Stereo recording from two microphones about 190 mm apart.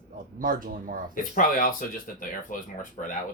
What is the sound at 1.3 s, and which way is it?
Speech, 45° left (ahead or behind).